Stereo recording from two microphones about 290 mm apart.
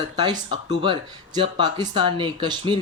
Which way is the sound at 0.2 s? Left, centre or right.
Centre.